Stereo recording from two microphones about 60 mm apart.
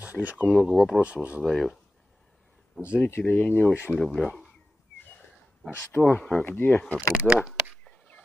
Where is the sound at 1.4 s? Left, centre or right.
Centre.